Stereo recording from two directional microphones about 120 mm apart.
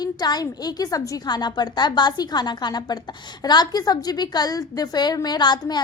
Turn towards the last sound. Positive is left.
turn(degrees=35)  # may be behind; listen again after turning